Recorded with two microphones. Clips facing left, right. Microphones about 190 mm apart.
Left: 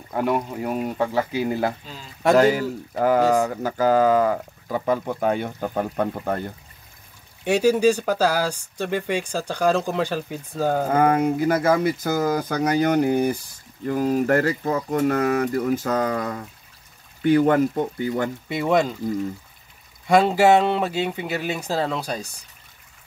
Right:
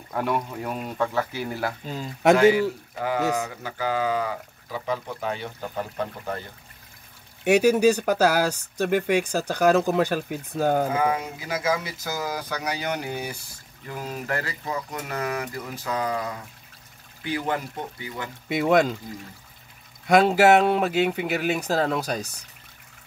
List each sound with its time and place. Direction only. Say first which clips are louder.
0.1 s speech: left 3 dB; 5° left (ahead or behind)
0.9 s speech: even; 15° left (ahead or behind)
2.3 s speech: left 2 dB; 40° left (ahead or behind)
7.4 s speech: even; 5° right (ahead or behind)
10.9 s speech: left 6 dB; 55° left (ahead or behind)
13.8 s speech: left 11 dB; 40° left (ahead or behind)
18.5 s speech: right 2 dB; centre (ahead or behind)
20.1 s speech: left 1 dB; 5° right (ahead or behind)